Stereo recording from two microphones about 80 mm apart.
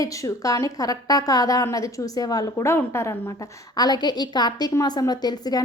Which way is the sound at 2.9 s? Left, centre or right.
Left.